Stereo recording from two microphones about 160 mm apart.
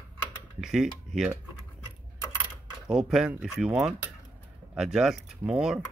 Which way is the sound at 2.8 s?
5° right (ahead or behind).